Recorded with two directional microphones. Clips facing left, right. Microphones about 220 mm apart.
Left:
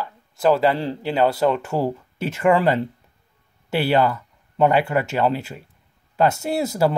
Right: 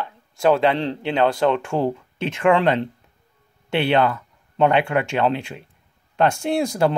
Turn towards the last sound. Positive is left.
turn(degrees=5)  # may be behind; listen again after turning